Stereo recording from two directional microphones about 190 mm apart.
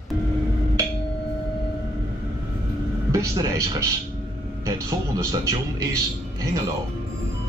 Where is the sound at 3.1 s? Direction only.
15° right (ahead or behind).